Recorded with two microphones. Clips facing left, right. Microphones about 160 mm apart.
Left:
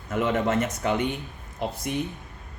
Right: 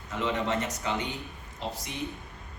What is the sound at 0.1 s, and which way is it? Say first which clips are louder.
Speech: left 5 dB; 50° left (ahead or behind).